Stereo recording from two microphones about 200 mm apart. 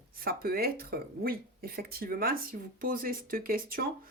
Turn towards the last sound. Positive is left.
turn(degrees=-45)  # may be behind; listen again after turning